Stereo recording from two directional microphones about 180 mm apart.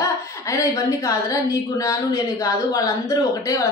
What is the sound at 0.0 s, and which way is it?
A woman's voice, 20° left (ahead or behind).